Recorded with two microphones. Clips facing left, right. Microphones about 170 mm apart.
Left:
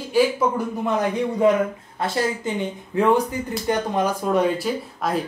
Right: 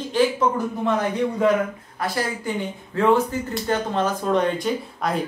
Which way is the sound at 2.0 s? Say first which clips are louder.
Left 2 dB; 20° left (ahead or behind).